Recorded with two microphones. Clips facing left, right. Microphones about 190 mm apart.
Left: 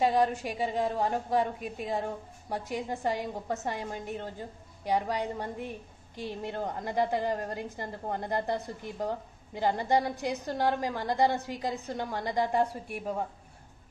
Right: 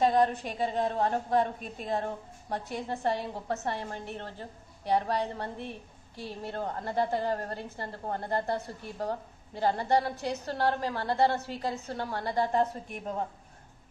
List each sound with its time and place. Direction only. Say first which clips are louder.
0.0 s a woman's voice: right 1 dB; 10° left (ahead or behind)